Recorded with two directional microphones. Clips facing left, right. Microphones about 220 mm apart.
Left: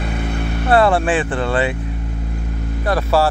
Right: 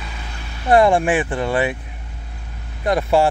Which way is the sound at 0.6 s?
15° right (ahead or behind).